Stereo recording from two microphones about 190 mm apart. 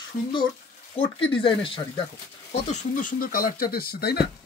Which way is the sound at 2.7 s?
45° left (ahead or behind).